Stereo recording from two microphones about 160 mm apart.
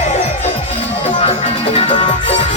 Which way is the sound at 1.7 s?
30° left (ahead or behind).